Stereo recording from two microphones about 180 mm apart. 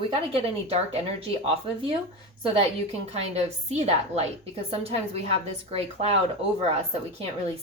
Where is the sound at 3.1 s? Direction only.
35° right (ahead or behind).